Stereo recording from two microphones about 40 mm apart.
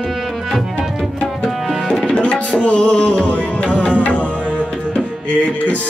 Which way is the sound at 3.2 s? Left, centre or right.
Left.